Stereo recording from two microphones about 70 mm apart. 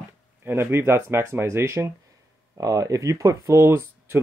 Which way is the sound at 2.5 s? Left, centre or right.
Right.